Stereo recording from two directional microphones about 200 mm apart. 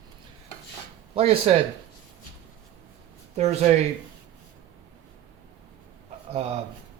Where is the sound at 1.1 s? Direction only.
30° right (ahead or behind).